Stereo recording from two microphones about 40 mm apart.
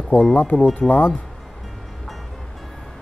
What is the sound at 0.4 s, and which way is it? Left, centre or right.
Speech, left.